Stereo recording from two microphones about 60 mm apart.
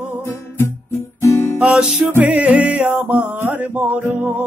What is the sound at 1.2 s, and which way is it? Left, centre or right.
Guitar, left.